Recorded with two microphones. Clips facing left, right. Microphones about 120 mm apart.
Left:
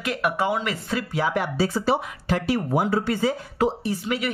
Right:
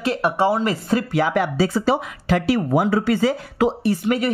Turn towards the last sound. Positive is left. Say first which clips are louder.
# right 6 dB
turn(degrees=-40)  # may be behind; listen again after turning